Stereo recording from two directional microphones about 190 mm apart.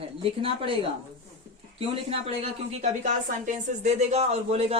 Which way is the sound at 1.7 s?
30° right (ahead or behind).